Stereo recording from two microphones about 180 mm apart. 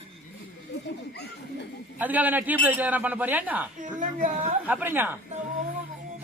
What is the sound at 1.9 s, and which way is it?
A man's voice, 10° right (ahead or behind).